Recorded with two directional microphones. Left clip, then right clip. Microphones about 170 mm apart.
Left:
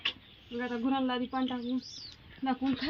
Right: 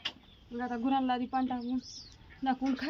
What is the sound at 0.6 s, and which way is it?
Speech, 20° right (ahead or behind).